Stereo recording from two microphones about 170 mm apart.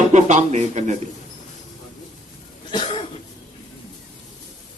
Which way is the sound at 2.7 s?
30° left (ahead or behind).